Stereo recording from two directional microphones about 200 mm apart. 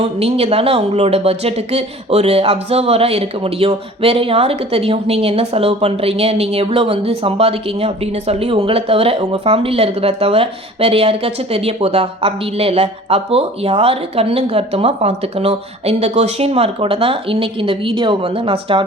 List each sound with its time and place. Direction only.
0.0 s speech: 30° right (ahead or behind)